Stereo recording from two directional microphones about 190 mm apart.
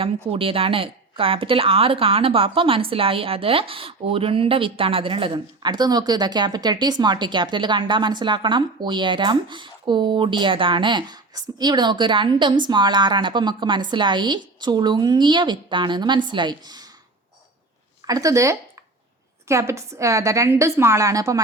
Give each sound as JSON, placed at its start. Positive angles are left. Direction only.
{"t": 0.0, "sound": "a woman's voice", "side_deg": -30}
{"t": 18.0, "sound": "a woman's voice", "side_deg": -20}